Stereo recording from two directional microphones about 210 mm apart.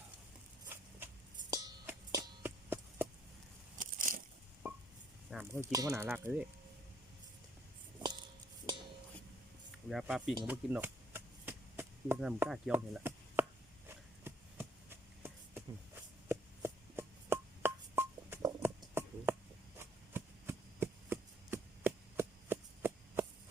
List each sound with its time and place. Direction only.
0.7 s music: 10° right (ahead or behind)
3.8 s crushing: 40° right (ahead or behind)
5.3 s speech: 10° right (ahead or behind)
9.9 s speech: 5° right (ahead or behind)
10.4 s chop: 10° right (ahead or behind)
19.8 s a sound: 10° right (ahead or behind)